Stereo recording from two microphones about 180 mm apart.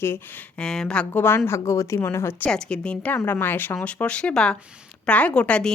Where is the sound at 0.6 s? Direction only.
5° left (ahead or behind).